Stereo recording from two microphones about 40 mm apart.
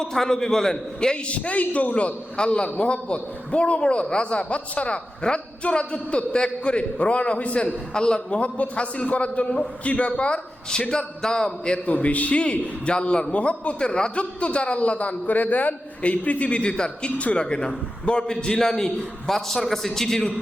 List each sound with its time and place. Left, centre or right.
0.0 s a man's voice: centre
1.1 s a man's voice: left
7.6 s a man's voice: left
11.9 s a man's voice: left; by 20.3 s centre